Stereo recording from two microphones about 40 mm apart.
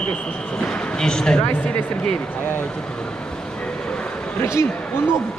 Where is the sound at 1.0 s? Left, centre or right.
Centre.